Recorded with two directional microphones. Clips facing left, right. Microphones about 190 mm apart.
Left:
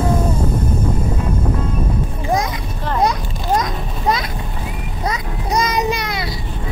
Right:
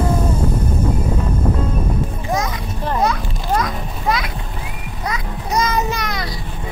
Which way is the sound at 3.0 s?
15° left (ahead or behind).